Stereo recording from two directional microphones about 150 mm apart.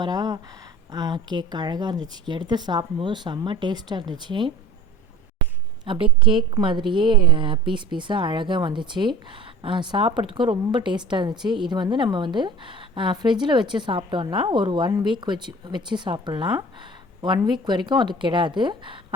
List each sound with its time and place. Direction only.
0.0 s a woman's voice: 25° right (ahead or behind)
5.8 s a woman's voice: 35° right (ahead or behind)